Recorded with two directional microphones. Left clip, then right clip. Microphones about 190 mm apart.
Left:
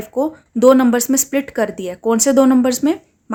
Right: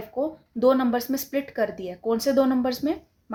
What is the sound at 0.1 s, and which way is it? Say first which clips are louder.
Speech: left 8 dB; 45° left (ahead or behind).